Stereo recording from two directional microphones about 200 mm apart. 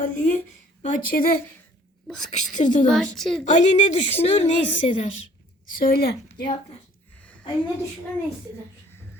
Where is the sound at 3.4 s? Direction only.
40° left (ahead or behind).